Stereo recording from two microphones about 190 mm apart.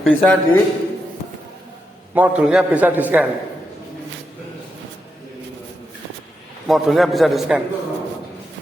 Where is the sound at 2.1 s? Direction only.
5° right (ahead or behind).